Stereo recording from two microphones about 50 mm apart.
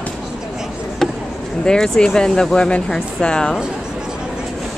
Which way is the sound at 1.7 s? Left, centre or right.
Centre.